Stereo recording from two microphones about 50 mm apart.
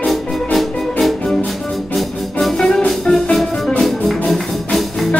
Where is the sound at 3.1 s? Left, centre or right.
Centre.